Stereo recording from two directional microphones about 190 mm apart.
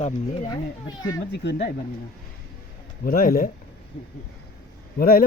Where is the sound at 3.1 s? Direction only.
50° left (ahead or behind).